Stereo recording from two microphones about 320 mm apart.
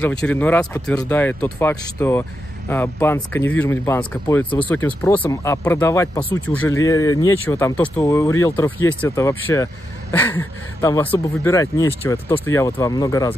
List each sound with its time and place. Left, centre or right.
0.0 s speech: centre